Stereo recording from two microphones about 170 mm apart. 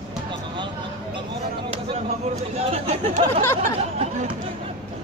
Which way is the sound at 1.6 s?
35° right (ahead or behind).